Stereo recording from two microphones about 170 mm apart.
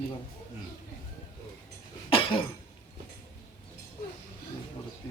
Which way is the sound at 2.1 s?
30° left (ahead or behind).